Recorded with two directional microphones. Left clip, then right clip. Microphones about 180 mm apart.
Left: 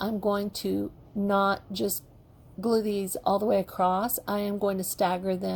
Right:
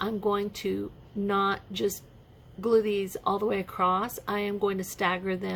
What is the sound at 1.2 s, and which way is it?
Speech, 35° left (ahead or behind).